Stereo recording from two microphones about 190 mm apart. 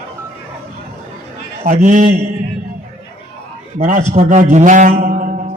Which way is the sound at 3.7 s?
45° right (ahead or behind).